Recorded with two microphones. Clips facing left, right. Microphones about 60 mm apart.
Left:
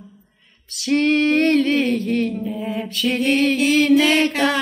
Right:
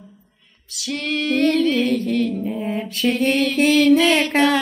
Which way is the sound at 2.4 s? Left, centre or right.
Right.